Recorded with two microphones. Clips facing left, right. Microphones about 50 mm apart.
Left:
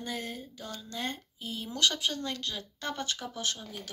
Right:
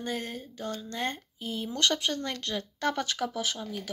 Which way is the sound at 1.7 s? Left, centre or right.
Right.